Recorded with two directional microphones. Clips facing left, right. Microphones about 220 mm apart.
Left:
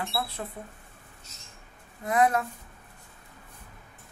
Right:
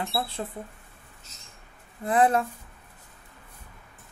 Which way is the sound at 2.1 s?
30° right (ahead or behind).